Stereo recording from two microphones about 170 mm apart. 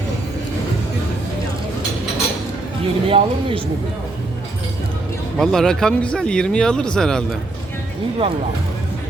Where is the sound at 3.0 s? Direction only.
30° right (ahead or behind).